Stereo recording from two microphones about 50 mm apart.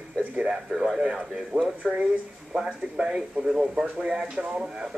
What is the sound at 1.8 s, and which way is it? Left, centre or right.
Speech, centre.